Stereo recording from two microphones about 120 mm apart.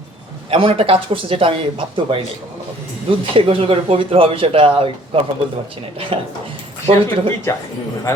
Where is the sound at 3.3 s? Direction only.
50° right (ahead or behind).